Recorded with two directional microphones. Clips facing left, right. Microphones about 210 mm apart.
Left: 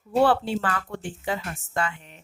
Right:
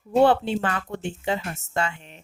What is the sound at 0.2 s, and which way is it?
Speech, 20° right (ahead or behind).